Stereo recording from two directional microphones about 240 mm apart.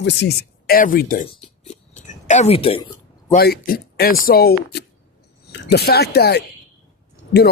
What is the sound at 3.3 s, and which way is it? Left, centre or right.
Speech, left.